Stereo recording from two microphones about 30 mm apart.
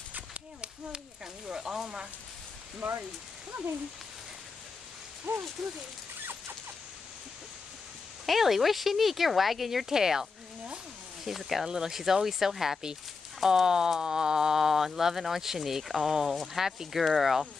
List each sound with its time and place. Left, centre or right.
0.6 s a sound: right
1.2 s speech: centre
3.5 s speech: right
5.3 s speech: right
8.3 s speech: centre
9.8 s speech: centre
11.2 s speech: centre
11.6 s speech: centre
13.9 s a sound: right
14.6 s speech: centre